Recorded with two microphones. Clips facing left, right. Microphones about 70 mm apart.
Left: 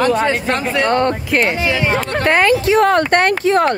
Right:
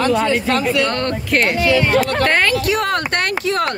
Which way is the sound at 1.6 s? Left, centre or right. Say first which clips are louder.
Right 2 dB; centre.